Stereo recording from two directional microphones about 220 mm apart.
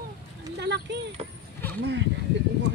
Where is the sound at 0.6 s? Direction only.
50° right (ahead or behind).